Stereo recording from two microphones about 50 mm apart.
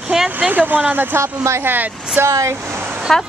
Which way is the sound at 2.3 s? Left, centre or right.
Right.